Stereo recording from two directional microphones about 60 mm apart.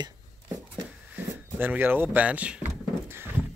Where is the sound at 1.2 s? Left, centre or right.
Right.